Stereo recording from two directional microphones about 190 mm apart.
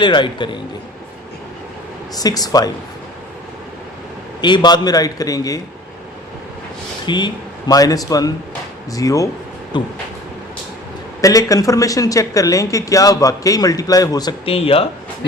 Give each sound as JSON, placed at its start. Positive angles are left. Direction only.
{"t": 0.0, "sound": "a man's voice", "side_deg": 25}
{"t": 2.1, "sound": "a man's voice", "side_deg": 20}
{"t": 4.4, "sound": "a man's voice", "side_deg": 25}
{"t": 7.0, "sound": "a man's voice", "side_deg": 25}
{"t": 11.2, "sound": "speech", "side_deg": 15}